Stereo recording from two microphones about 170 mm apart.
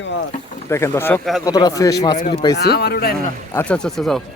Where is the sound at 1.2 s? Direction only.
Centre (ahead or behind).